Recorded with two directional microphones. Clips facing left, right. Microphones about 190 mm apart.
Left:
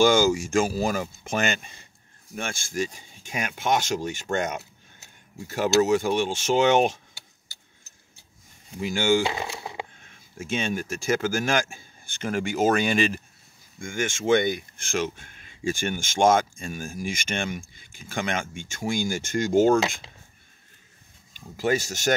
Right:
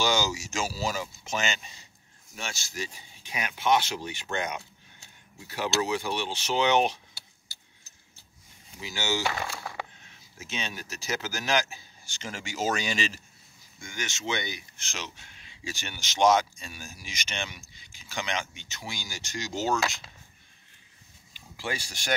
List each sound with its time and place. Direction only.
0.0 s speech: 50° left (ahead or behind)
8.7 s speech: 50° left (ahead or behind)
9.2 s a sound: 20° left (ahead or behind)
10.0 s speech: 50° left (ahead or behind)
21.3 s speech: 45° left (ahead or behind)